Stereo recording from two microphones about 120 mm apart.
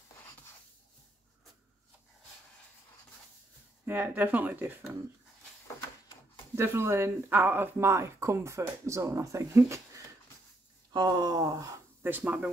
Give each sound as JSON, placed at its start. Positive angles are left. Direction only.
{"t": 3.8, "sound": "speech", "side_deg": -15}
{"t": 6.5, "sound": "speech", "side_deg": -20}
{"t": 10.9, "sound": "speech", "side_deg": -35}